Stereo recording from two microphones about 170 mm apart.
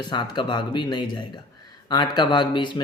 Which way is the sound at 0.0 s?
25° left (ahead or behind).